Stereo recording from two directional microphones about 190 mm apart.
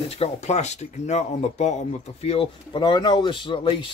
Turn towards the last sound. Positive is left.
turn(degrees=25)  # may be behind; listen again after turning